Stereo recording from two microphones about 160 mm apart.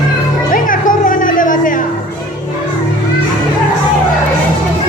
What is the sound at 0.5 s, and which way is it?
Music, 55° left (ahead or behind).